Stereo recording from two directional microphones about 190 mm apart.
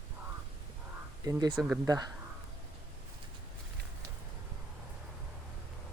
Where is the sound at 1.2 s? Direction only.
20° right (ahead or behind).